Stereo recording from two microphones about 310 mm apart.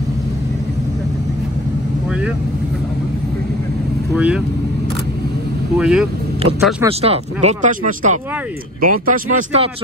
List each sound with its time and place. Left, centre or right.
4.1 s speech: centre
5.8 s speech: centre
6.4 s speech: centre